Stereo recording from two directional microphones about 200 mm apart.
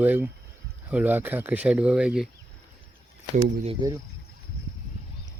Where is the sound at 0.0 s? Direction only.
10° right (ahead or behind).